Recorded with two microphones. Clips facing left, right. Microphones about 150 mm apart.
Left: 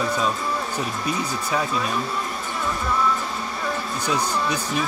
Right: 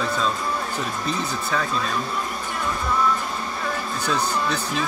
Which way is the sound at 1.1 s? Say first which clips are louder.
Left 1 dB; 15° left (ahead or behind).